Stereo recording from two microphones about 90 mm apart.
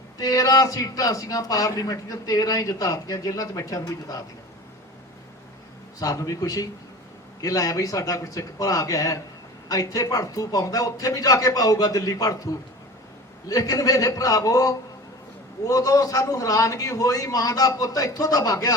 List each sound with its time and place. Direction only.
0.2 s a man's voice: 40° left (ahead or behind)
6.0 s a man's voice: 40° left (ahead or behind)